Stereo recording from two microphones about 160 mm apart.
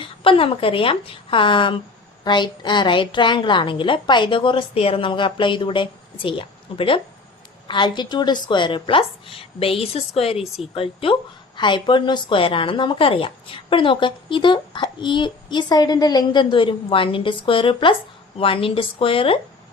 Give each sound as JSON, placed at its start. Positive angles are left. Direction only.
{"t": 0.0, "sound": "a woman's voice", "side_deg": 35}